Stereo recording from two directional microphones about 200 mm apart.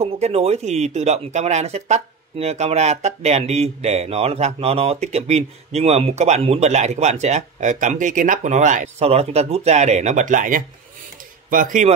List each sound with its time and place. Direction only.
0.0 s speech: 30° right (ahead or behind)